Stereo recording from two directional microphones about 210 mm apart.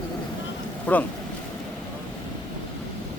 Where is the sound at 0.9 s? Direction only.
5° left (ahead or behind).